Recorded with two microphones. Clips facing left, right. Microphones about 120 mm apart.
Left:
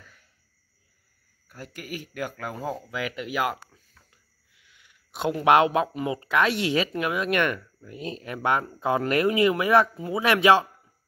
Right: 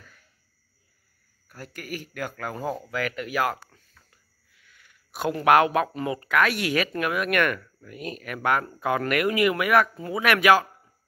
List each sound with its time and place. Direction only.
1.5 s speech: 15° left (ahead or behind)
4.6 s speech: 20° left (ahead or behind)
9.9 s speech: 15° left (ahead or behind)
10.2 s speech: 25° left (ahead or behind)